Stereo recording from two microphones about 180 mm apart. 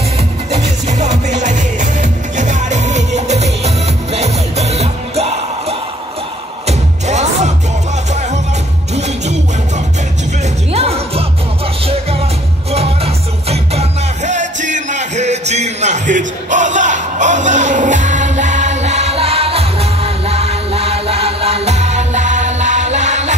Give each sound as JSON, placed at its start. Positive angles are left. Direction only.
{"t": 0.8, "sound": "music", "side_deg": -40}
{"t": 8.9, "sound": "music", "side_deg": -40}
{"t": 10.7, "sound": "music", "side_deg": -35}
{"t": 12.7, "sound": "music", "side_deg": -35}